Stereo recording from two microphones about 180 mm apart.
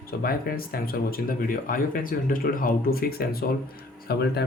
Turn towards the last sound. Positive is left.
turn(degrees=65)  # may be behind; listen again after turning